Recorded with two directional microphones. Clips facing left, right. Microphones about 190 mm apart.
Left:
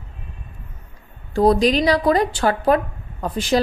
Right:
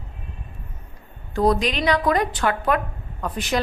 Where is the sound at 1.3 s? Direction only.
35° left (ahead or behind).